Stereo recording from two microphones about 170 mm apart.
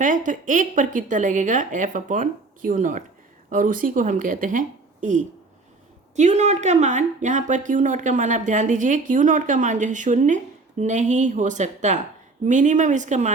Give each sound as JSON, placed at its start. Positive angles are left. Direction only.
{"t": 0.0, "sound": "a woman's voice", "side_deg": -50}